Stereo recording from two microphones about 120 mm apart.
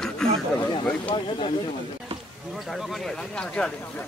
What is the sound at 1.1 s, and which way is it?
Speech, 40° left (ahead or behind).